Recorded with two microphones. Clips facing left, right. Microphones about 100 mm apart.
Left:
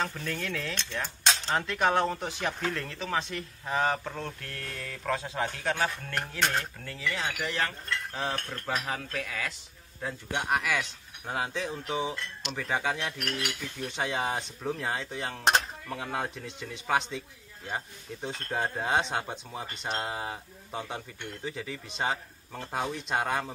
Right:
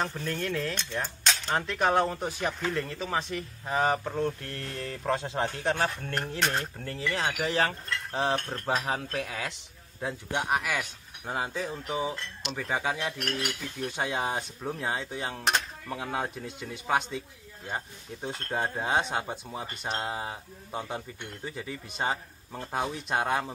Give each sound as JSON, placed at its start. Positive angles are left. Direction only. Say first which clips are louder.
{"t": 0.0, "sound": "speech", "louder": "right 2 dB", "side_deg": -15}
{"t": 10.0, "sound": "speech", "louder": "right 1 dB", "side_deg": -10}